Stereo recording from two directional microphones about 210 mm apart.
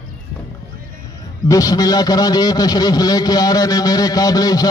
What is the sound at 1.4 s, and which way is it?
A man's voice, 15° left (ahead or behind).